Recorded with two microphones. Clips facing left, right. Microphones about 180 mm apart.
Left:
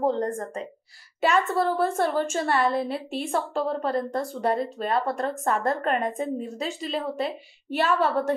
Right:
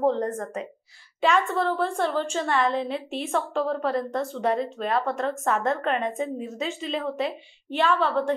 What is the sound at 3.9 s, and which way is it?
A woman's voice, 35° left (ahead or behind).